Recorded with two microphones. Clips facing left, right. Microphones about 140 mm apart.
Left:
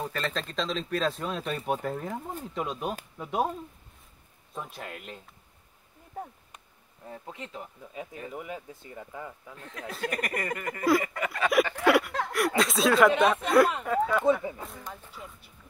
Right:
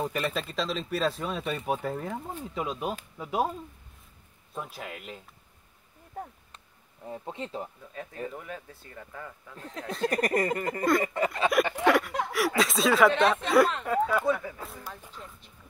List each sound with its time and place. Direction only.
0.0 s speech: 15° right (ahead or behind)
4.6 s speech: centre (ahead or behind)
7.1 s speech: 25° right (ahead or behind)
7.9 s speech: 10° left (ahead or behind)
9.6 s speech: 35° right (ahead or behind)
12.3 s speech: centre (ahead or behind)
14.2 s speech: 25° left (ahead or behind)
14.6 s speech: 5° right (ahead or behind)
15.0 s music: 5° left (ahead or behind)